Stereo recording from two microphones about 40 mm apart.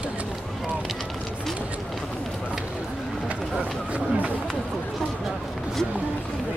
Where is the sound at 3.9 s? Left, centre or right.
Right.